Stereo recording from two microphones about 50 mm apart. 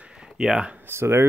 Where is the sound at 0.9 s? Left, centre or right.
Right.